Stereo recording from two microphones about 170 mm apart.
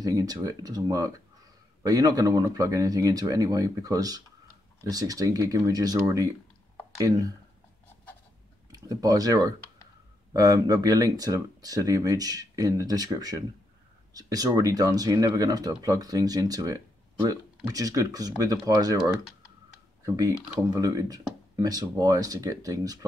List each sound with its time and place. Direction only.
0.0 s speech: 20° right (ahead or behind)
8.7 s speech: 20° right (ahead or behind)